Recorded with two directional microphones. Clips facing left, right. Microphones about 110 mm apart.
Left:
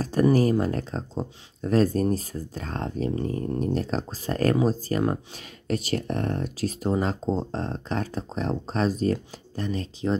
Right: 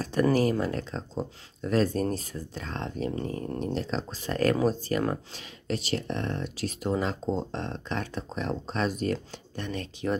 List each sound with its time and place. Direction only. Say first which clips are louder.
0.0 s speech: left 3 dB; 40° left (ahead or behind)